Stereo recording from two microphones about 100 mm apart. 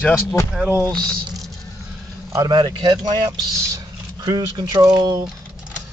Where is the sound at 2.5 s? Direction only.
45° right (ahead or behind).